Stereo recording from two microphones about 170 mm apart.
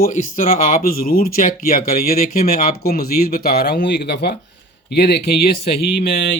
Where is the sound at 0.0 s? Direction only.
50° left (ahead or behind).